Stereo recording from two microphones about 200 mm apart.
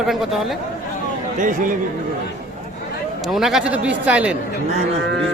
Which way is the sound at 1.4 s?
40° right (ahead or behind).